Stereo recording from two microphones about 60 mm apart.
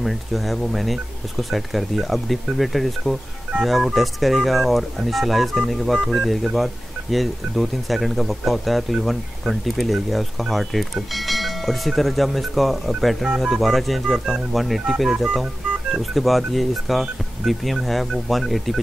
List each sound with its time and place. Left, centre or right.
0.0 s speech: centre